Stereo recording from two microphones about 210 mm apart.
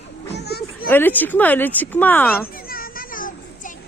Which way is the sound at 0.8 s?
10° left (ahead or behind).